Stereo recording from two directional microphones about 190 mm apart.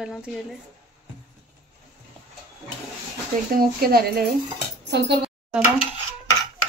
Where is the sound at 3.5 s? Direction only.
50° right (ahead or behind).